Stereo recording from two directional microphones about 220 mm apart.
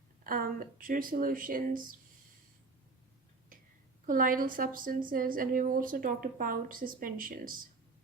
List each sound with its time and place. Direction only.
0.3 s speech: 40° right (ahead or behind)
4.0 s a woman's voice: 40° right (ahead or behind)